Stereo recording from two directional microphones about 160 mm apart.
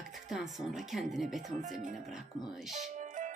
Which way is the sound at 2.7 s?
45° right (ahead or behind).